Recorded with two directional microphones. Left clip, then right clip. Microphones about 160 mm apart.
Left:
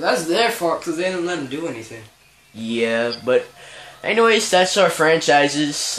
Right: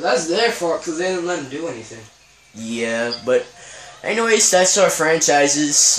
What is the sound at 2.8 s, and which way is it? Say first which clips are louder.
Speech: left 1 dB; 15° left (ahead or behind).